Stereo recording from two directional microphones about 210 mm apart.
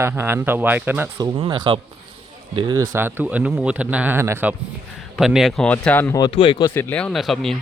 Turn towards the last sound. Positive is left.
turn(degrees=0)  # may be behind; listen again after turning